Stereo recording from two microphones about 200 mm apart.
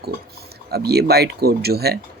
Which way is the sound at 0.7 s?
55° right (ahead or behind).